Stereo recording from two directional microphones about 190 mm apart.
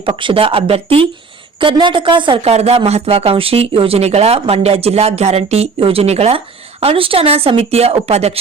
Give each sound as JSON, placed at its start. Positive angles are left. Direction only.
{"t": 0.0, "sound": "a woman's voice", "side_deg": -25}